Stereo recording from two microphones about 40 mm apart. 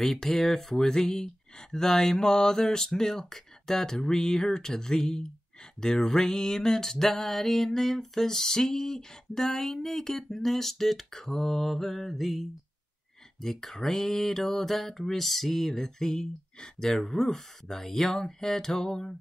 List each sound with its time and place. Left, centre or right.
0.0 s speech: centre
10.3 s mantra: centre
13.4 s speech: centre
16.9 s speech: centre